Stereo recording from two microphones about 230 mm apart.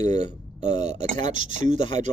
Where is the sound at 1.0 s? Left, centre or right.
Right.